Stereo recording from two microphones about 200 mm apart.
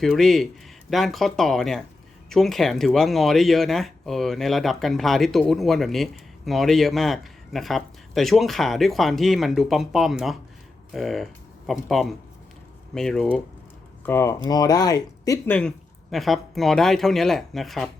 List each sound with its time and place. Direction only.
0.0 s speech: centre (ahead or behind)